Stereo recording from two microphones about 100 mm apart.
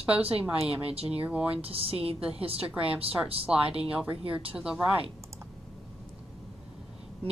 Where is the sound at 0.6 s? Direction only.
80° right.